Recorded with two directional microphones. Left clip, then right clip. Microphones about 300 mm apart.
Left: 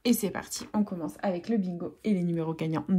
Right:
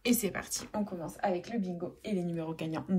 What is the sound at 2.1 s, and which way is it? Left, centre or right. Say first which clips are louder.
Speech: left 6 dB; left.